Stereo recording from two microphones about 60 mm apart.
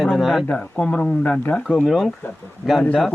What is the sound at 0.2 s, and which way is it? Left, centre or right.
Speech, centre.